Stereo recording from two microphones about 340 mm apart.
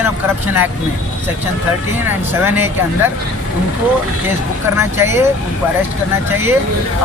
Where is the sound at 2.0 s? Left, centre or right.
Centre.